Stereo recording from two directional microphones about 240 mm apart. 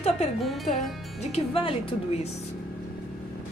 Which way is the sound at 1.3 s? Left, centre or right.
Left.